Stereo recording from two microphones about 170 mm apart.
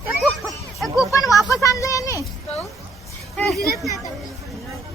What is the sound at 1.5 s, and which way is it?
Speech, 20° left (ahead or behind).